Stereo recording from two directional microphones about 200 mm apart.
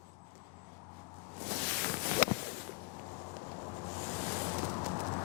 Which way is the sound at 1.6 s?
10° left (ahead or behind).